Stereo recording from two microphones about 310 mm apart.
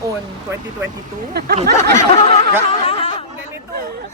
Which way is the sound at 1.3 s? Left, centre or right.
Right.